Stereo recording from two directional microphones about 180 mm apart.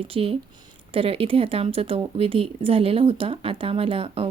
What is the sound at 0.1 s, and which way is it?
A woman's voice, 30° right (ahead or behind).